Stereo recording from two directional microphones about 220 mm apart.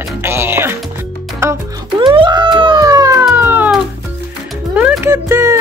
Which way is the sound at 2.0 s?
20° right (ahead or behind).